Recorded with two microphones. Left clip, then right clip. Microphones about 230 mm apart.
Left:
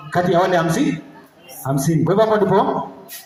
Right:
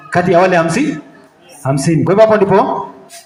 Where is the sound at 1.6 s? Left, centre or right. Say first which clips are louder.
Right 5 dB; right.